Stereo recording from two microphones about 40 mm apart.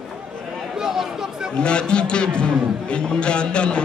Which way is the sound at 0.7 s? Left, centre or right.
Centre.